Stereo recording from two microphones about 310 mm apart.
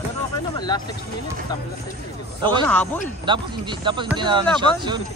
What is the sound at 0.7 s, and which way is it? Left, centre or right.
Speech, centre.